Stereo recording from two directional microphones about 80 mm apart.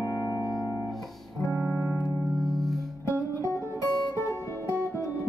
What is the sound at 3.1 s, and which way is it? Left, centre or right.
Music, left.